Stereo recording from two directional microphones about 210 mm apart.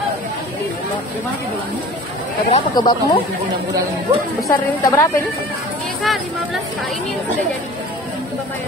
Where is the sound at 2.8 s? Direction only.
20° left (ahead or behind).